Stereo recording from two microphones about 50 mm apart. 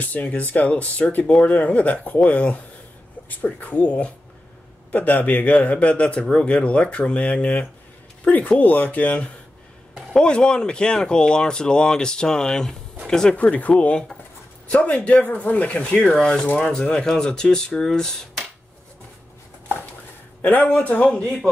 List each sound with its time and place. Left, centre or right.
0.0 s speech: left
10.1 s speech: centre
13.4 s speech: left
16.9 s speech: centre